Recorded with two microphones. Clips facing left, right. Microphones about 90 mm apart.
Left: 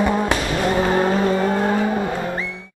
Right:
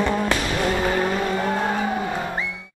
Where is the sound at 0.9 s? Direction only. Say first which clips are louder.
Left 4 dB; 35° left (ahead or behind).